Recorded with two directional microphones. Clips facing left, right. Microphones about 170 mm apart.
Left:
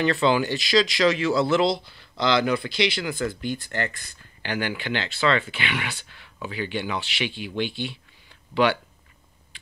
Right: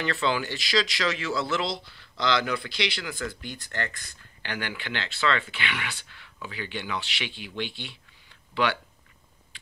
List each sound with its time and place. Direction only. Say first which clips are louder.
0.0 s speech: left 6 dB; 20° left (ahead or behind)